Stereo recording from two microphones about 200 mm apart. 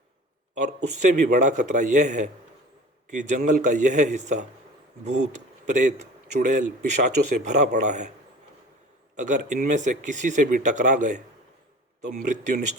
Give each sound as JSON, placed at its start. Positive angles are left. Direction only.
{"t": 1.2, "sound": "speech", "side_deg": -40}
{"t": 5.6, "sound": "speech", "side_deg": -40}
{"t": 9.1, "sound": "speech", "side_deg": -40}